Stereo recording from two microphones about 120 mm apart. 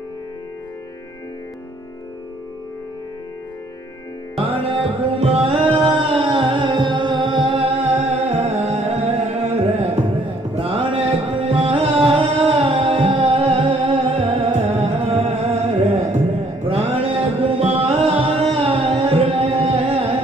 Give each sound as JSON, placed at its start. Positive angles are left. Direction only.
{"t": 4.4, "sound": "music", "side_deg": -50}
{"t": 7.8, "sound": "music", "side_deg": -55}
{"t": 16.9, "sound": "music", "side_deg": -50}